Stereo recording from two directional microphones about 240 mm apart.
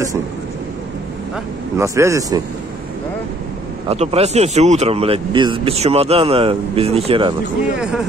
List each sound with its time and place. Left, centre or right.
1.8 s speech: centre
3.9 s speech: right
7.7 s speech: centre